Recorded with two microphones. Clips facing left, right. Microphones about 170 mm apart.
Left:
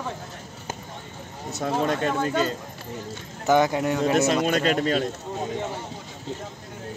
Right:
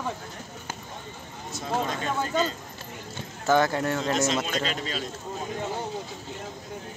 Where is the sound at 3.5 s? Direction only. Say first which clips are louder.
Left 2 dB; 15° left (ahead or behind).